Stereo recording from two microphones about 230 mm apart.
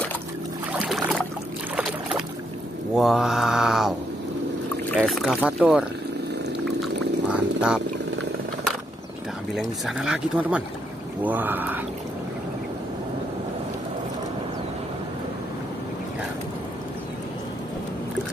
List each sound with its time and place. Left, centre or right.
0.7 s boat: centre
2.9 s speech: centre
4.9 s speech: centre
6.6 s pour: centre
9.5 s speech: centre